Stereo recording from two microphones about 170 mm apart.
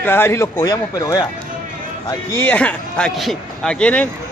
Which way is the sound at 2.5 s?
10° left (ahead or behind).